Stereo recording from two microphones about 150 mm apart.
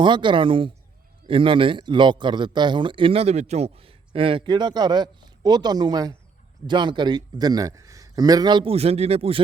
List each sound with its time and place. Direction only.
0.0 s a man's voice: 30° right (ahead or behind)